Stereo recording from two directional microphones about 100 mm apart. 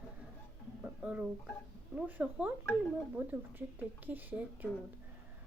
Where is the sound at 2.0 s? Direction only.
15° right (ahead or behind).